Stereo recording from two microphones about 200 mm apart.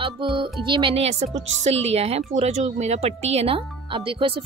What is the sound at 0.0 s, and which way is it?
Music, 25° right (ahead or behind).